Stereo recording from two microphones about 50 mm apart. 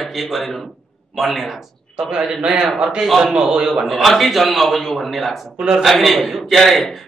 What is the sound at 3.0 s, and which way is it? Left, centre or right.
Speech, centre.